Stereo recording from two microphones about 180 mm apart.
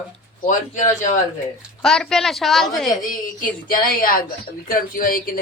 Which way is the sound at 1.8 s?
5° left (ahead or behind).